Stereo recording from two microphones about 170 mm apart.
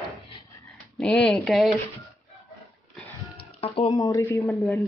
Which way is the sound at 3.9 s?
20° left (ahead or behind).